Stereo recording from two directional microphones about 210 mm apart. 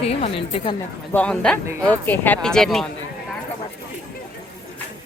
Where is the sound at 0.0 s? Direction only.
30° left (ahead or behind).